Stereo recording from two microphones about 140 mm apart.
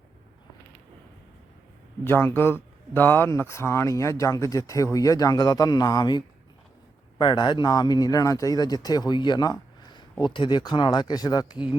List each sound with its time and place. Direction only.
2.0 s a man's voice: 15° left (ahead or behind)